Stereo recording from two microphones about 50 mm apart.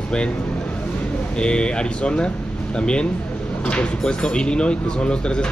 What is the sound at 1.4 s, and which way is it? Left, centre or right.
Speech, centre.